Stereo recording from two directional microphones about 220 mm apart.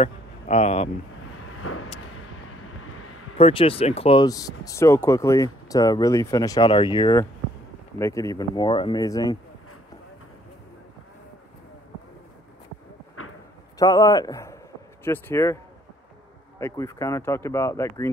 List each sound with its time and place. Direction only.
0.0 s speech: 30° left (ahead or behind)
1.6 s vehicle: 75° left (ahead or behind)
3.3 s speech: 25° left (ahead or behind)
13.2 s a sound: 70° left (ahead or behind)
13.7 s a man's voice: 15° left (ahead or behind)